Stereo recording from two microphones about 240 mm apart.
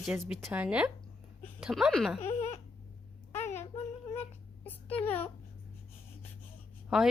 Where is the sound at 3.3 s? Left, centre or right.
Centre.